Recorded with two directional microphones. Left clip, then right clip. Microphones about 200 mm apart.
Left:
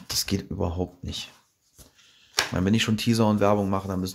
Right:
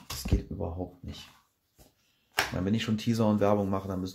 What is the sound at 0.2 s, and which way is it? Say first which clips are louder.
Speech: left 6 dB; 25° left (ahead or behind).